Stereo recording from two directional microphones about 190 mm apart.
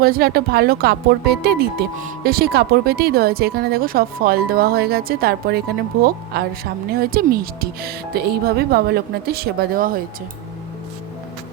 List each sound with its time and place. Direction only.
0.0 s speech: 55° right (ahead or behind)